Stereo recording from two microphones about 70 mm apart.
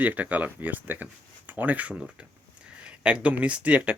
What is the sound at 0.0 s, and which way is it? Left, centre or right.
Speech, right.